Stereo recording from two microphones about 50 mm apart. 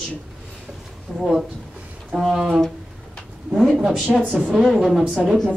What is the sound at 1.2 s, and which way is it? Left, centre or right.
A woman's voice, centre.